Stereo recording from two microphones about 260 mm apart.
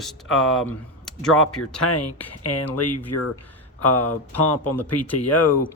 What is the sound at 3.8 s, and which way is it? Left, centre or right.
Speech, left.